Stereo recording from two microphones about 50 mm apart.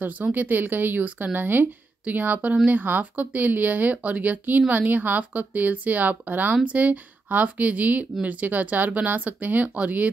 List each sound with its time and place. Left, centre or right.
0.0 s speech: right